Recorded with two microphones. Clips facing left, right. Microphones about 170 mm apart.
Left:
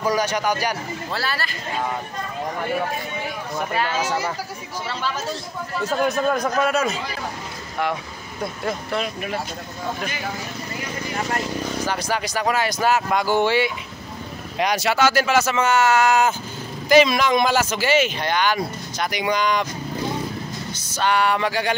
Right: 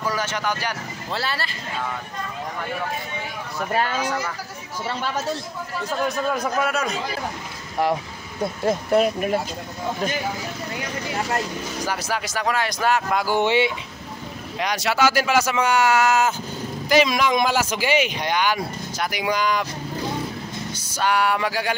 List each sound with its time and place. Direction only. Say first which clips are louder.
0.0 s speech: left 4 dB; 15° left (ahead or behind)
1.1 s speech: right 1 dB; 25° right (ahead or behind)
6.3 s speech: left 3 dB; 5° right (ahead or behind)
8.9 s speech: right 7 dB; 40° right (ahead or behind)
11.8 s speech: right 1 dB; 5° right (ahead or behind)
13.4 s speech: even; 20° right (ahead or behind)
14.6 s speech: left 4 dB; 10° left (ahead or behind)
14.9 s speech: right 1 dB; 10° right (ahead or behind)
20.7 s music: left 1 dB; 10° right (ahead or behind)